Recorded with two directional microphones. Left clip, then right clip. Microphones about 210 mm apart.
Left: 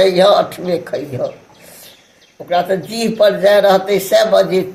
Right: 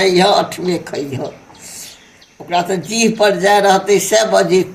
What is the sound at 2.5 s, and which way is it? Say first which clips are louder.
Speech: left 1 dB; 15° left (ahead or behind).